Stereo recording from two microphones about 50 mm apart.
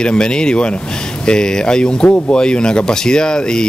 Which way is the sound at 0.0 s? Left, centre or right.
Centre.